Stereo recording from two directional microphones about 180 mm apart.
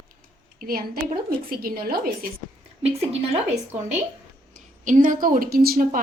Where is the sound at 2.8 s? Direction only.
35° right (ahead or behind).